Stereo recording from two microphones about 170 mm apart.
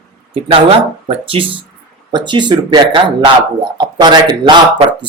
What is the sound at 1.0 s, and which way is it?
Speech, 35° right (ahead or behind).